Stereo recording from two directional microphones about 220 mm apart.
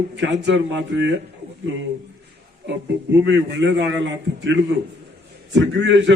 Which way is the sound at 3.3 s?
55° right (ahead or behind).